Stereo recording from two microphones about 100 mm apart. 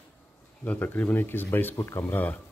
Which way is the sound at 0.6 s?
15° left (ahead or behind).